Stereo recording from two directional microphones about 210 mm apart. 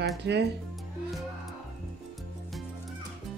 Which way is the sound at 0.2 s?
55° right (ahead or behind).